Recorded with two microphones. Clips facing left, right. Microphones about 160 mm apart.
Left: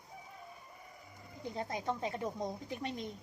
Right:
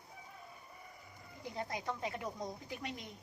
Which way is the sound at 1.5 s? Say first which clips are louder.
Left 3 dB; 25° left (ahead or behind).